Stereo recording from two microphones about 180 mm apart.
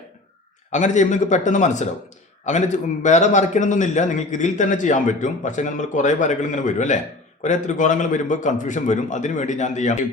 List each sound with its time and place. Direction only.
0.7 s a man's voice: 45° left (ahead or behind)